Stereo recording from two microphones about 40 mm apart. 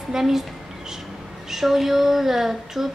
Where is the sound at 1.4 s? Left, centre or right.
Centre.